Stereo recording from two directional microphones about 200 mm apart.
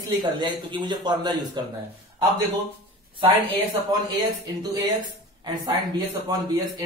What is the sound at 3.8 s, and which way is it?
Speech, 20° right (ahead or behind).